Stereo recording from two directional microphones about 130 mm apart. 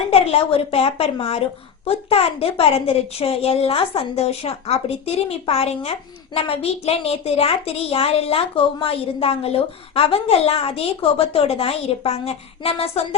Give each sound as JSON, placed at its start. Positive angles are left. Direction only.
{"t": 0.1, "sound": "a woman's voice", "side_deg": 50}